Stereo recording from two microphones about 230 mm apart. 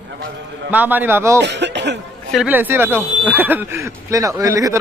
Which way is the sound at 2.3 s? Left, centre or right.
Centre.